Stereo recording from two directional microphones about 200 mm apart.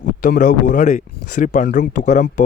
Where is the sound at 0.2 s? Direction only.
40° left (ahead or behind).